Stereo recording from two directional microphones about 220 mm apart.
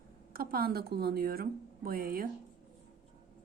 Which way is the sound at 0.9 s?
45° right (ahead or behind).